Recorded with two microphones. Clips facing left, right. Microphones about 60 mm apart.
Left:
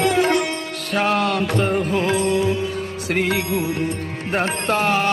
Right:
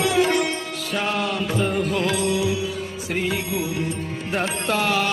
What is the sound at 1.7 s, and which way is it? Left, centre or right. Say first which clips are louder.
Music: left 3 dB; left.